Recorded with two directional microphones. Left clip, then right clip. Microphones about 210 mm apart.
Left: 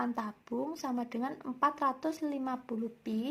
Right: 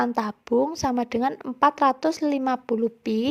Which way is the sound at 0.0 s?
45° right (ahead or behind).